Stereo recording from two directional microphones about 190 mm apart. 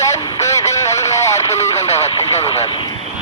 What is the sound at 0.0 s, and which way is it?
Radio, 15° left (ahead or behind).